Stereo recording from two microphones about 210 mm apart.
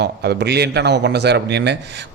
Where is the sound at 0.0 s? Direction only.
55° right (ahead or behind).